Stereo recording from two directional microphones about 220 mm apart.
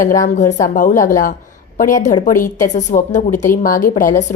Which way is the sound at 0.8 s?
35° left (ahead or behind).